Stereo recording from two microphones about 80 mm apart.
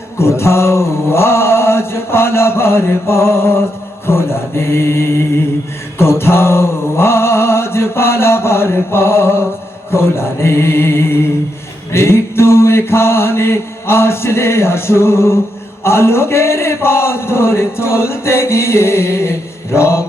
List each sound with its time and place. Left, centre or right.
0.2 s a man's voice: left